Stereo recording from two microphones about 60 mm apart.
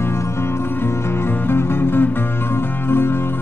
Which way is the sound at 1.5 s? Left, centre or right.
Left.